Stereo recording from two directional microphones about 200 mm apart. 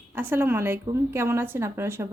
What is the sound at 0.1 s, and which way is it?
Speech, 10° right (ahead or behind).